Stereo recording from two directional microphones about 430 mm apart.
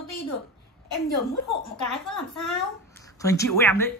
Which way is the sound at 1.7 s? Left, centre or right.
Left.